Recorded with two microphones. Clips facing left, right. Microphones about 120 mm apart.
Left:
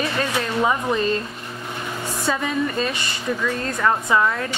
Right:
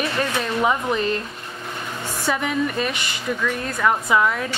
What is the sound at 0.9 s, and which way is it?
Speech, 15° left (ahead or behind).